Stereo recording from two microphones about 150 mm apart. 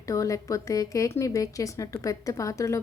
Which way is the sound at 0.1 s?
20° left (ahead or behind).